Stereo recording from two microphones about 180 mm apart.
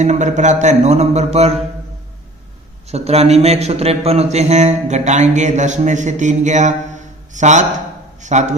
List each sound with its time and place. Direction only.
0.0 s a man's voice: 40° right (ahead or behind)
2.9 s a man's voice: 35° right (ahead or behind)